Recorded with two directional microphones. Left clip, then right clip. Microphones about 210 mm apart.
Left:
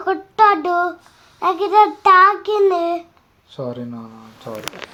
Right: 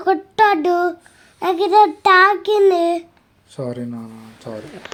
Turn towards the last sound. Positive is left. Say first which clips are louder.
# left 1 dB
turn(degrees=-15)  # may be behind; listen again after turning